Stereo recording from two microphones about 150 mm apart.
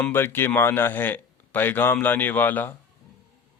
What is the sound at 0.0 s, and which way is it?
Speech, 15° left (ahead or behind).